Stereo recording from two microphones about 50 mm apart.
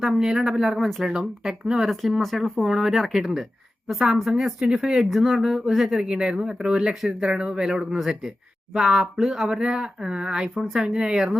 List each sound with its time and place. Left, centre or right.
0.0 s speech: centre
5.0 s speech: centre
7.9 s speech: centre
10.5 s speech: centre